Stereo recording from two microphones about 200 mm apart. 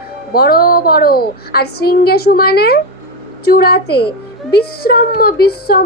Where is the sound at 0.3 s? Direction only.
50° left (ahead or behind).